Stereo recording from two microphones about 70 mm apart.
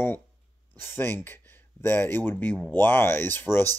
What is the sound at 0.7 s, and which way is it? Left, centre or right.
Speech, left.